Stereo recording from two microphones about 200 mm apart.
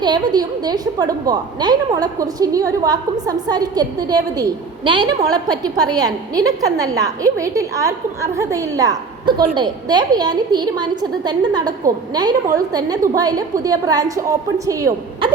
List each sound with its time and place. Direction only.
0.0 s a woman's voice: 20° right (ahead or behind)